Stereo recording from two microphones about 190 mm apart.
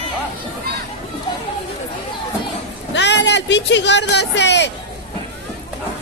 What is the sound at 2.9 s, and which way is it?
Speech, 65° left (ahead or behind).